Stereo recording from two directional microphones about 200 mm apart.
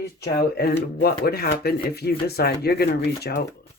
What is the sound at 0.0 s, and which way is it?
Speech, 55° left (ahead or behind).